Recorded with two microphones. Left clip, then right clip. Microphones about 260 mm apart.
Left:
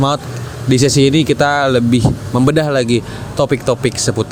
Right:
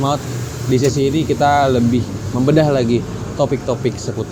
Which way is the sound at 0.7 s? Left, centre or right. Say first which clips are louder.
Left 4 dB; left.